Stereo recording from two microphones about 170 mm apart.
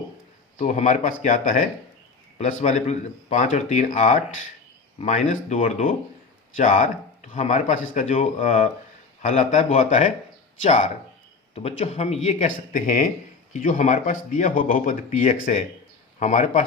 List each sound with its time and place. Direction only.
0.6 s speech: 45° left (ahead or behind)